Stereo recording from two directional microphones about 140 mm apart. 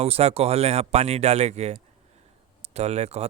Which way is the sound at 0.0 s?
50° right (ahead or behind).